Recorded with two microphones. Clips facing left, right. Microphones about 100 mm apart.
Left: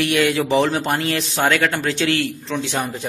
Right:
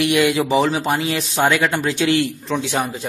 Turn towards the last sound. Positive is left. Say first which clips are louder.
# right 2 dB
turn(degrees=-5)  # may be behind; listen again after turning